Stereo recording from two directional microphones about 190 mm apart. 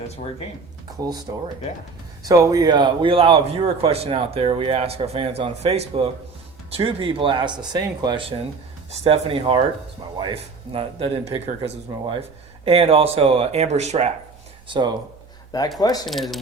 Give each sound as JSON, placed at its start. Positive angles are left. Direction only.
{"t": 0.9, "sound": "a man's voice", "side_deg": -20}
{"t": 14.7, "sound": "a man's voice", "side_deg": -25}
{"t": 15.5, "sound": "speech", "side_deg": 20}
{"t": 16.0, "sound": "speech", "side_deg": 0}